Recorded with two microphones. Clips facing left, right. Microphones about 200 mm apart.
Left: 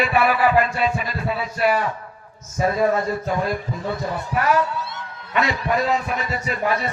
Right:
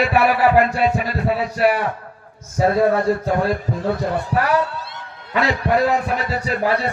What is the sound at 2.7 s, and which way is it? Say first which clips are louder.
A man's voice: right 4 dB; 70° right (ahead or behind).